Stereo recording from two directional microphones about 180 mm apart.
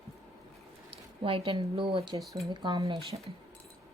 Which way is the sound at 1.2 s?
30° right (ahead or behind).